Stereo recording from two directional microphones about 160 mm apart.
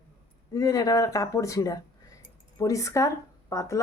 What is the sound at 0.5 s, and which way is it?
A woman's voice, 20° left (ahead or behind).